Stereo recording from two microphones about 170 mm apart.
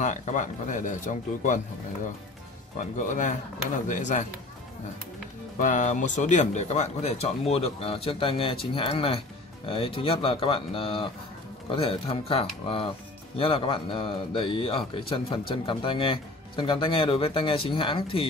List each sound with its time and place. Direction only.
0.0 s speech: 45° left (ahead or behind)
2.8 s speech: 50° left (ahead or behind)
5.6 s speech: 45° left (ahead or behind)